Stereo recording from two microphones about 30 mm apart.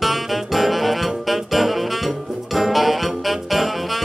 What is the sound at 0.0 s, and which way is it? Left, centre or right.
Saxophone, centre.